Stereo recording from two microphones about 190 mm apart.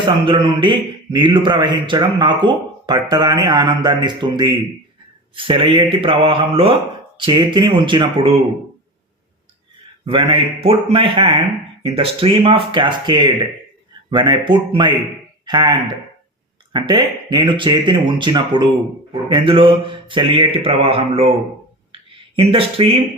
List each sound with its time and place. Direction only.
0.6 s speech: 25° right (ahead or behind)
10.1 s speech: 30° right (ahead or behind)